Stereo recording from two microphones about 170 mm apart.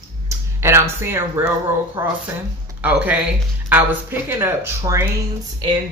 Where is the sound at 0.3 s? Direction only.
15° right (ahead or behind).